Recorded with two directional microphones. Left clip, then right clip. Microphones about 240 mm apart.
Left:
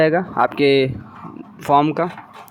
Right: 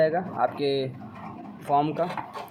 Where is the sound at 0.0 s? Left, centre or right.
Left.